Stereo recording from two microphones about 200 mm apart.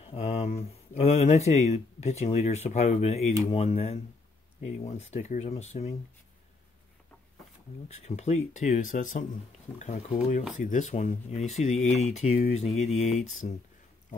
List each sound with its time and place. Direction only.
0.0 s speech: 30° left (ahead or behind)
7.9 s speech: 35° left (ahead or behind)